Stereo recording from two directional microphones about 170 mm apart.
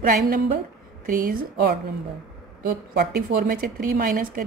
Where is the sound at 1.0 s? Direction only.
55° right (ahead or behind).